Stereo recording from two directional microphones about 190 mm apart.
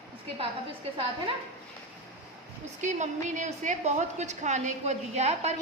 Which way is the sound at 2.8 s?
40° right (ahead or behind).